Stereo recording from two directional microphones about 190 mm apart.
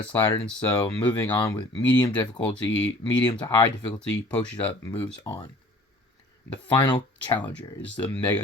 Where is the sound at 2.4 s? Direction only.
5° left (ahead or behind).